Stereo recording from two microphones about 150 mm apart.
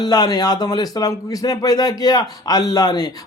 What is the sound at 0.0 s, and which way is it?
A man's voice, 25° left (ahead or behind).